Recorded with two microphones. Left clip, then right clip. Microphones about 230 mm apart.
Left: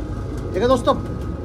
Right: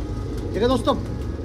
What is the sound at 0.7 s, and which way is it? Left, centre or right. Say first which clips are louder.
Speech: left 7 dB; right.